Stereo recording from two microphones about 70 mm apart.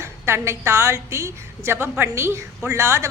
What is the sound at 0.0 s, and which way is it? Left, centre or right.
A woman's voice, right.